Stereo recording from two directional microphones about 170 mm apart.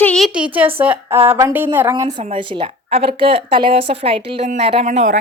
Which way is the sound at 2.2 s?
30° right (ahead or behind).